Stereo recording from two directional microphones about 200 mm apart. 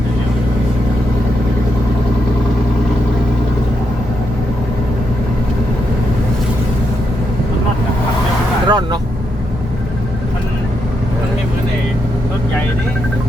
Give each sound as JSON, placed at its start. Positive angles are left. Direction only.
{"t": 8.6, "sound": "vehicle", "side_deg": -20}